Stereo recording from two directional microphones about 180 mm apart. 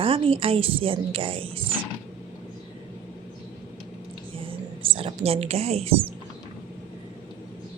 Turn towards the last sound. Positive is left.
turn(degrees=-35)  # may be behind; listen again after turning